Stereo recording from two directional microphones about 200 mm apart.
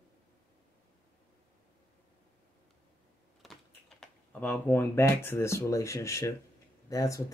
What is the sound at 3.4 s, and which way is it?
Speech, centre (ahead or behind).